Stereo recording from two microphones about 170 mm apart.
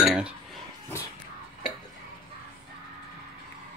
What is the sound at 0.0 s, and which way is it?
Chink, 5° right (ahead or behind).